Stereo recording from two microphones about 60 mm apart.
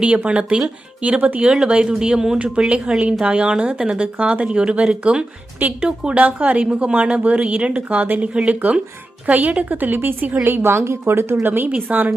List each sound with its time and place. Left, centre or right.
0.0 s speech: right
11.4 s speech: right